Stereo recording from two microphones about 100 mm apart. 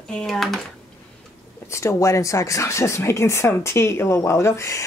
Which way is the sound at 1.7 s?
30° left (ahead or behind).